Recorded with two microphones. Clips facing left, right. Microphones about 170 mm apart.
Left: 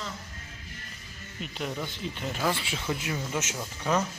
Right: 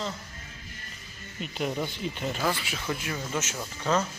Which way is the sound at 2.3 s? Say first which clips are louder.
Left 1 dB; centre (ahead or behind).